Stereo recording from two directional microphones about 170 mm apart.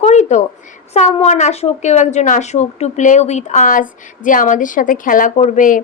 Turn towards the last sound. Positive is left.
turn(degrees=50)  # may be behind; listen again after turning